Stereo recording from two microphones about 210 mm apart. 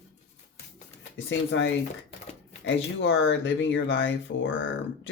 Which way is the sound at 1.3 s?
60° left (ahead or behind).